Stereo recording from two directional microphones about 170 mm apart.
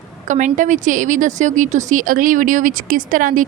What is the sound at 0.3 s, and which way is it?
A woman's voice, 45° right (ahead or behind).